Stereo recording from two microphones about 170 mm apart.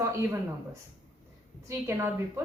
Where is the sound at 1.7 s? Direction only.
15° right (ahead or behind).